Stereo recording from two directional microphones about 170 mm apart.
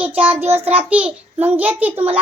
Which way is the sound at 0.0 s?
10° right (ahead or behind).